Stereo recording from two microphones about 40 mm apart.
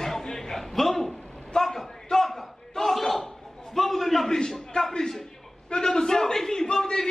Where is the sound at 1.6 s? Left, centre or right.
Centre.